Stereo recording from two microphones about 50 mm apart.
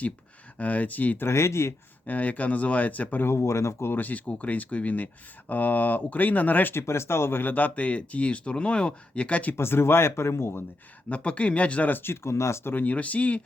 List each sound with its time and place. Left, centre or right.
0.6 s speech: left
1.2 s speech: left
2.0 s speech: left
3.2 s speech: left
3.9 s speech: left
6.7 s speech: left
7.5 s speech: left
9.6 s speech: left
11.1 s speech: left
12.0 s speech: left
12.7 s speech: left